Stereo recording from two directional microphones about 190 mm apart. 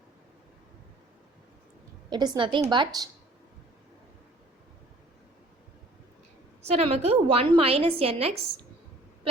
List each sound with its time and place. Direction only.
2.0 s a woman's voice: 20° right (ahead or behind)
6.7 s a woman's voice: 35° right (ahead or behind)